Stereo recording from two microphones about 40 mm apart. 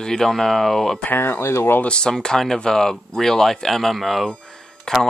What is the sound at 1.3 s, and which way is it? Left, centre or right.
Speech, left.